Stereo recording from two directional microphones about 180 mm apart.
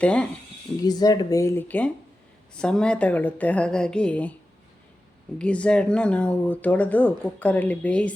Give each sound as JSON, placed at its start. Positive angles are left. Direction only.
{"t": 0.0, "sound": "speech", "side_deg": 5}
{"t": 0.8, "sound": "speech", "side_deg": 20}
{"t": 5.4, "sound": "speech", "side_deg": 5}